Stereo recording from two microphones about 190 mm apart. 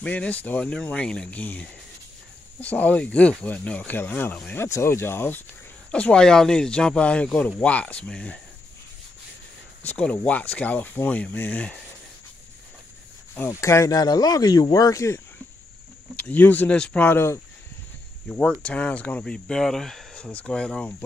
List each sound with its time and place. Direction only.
0.0 s speech: 5° left (ahead or behind)
9.9 s speech: 5° left (ahead or behind)
13.3 s speech: 15° left (ahead or behind)
16.2 s speech: 10° left (ahead or behind)